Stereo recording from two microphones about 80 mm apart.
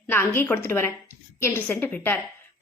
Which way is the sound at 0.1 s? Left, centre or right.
Left.